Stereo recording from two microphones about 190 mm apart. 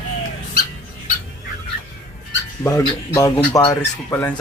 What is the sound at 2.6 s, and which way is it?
A man's voice, 15° left (ahead or behind).